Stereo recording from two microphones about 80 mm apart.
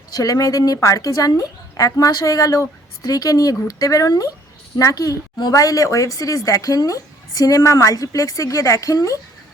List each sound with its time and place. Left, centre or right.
0.1 s a woman's voice: left